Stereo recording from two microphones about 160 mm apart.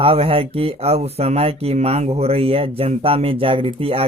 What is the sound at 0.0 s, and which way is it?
Speech, 35° right (ahead or behind).